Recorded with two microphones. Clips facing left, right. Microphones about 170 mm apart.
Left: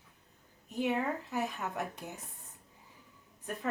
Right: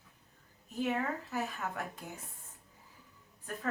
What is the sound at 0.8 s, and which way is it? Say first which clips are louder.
Speech: left 2 dB; 15° left (ahead or behind).